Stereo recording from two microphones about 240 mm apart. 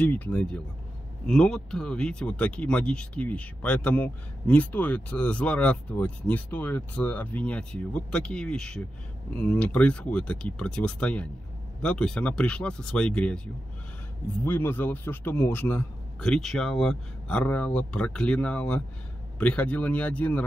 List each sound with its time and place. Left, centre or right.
0.0 s speech: centre
14.4 s speech: centre